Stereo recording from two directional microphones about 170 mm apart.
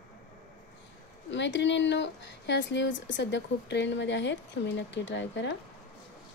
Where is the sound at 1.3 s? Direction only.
90° left.